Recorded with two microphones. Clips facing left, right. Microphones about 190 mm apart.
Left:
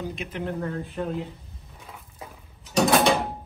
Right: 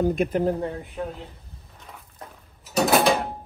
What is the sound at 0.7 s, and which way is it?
Speech, 15° right (ahead or behind).